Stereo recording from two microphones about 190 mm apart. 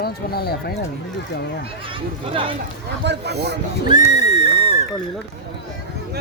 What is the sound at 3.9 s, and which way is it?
Neigh, 40° left (ahead or behind).